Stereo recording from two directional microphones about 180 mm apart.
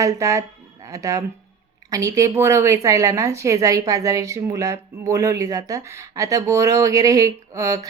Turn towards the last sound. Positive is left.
turn(degrees=-20)  # may be behind; listen again after turning